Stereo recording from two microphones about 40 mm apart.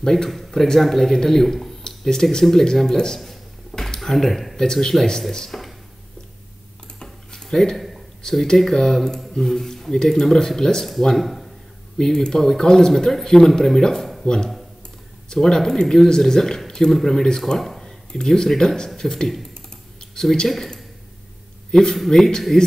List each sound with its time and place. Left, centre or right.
0.0 s speech: centre
1.8 s a sound: centre
2.5 s speech: centre
7.0 s cutlery: centre
7.7 s a sound: centre
8.5 s speech: centre
11.1 s speech: centre
12.0 s speech: centre
17.6 s a sound: centre
18.6 s speech: centre
21.7 s speech: centre